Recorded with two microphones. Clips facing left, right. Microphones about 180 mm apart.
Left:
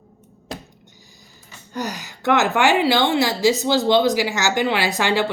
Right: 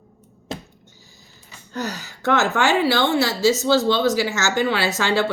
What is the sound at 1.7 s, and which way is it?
A woman's voice, 15° left (ahead or behind).